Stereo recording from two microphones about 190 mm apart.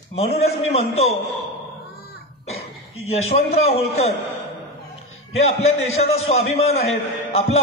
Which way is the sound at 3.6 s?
35° left (ahead or behind).